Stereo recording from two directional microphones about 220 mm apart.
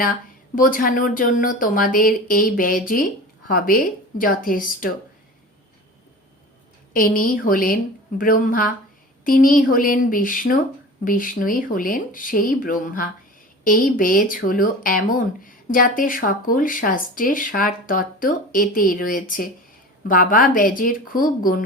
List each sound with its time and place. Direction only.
0.5 s speech: 40° left (ahead or behind)
6.9 s speech: 40° left (ahead or behind)